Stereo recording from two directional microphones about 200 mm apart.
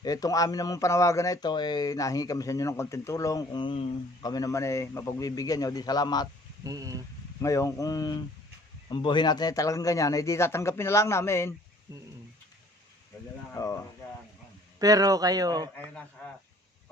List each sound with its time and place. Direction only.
0.0 s speech: 20° left (ahead or behind)
6.7 s speech: 15° right (ahead or behind)
7.4 s speech: 15° left (ahead or behind)
13.5 s speech: 15° left (ahead or behind)
14.8 s a man's voice: 20° right (ahead or behind)